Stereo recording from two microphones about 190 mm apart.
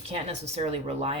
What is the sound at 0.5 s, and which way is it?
Speech, 35° right (ahead or behind).